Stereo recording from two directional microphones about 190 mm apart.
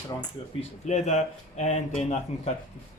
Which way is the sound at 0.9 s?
40° left (ahead or behind).